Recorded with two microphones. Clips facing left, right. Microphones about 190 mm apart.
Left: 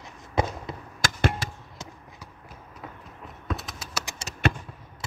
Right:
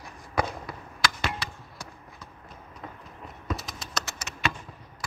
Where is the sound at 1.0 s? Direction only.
45° left (ahead or behind).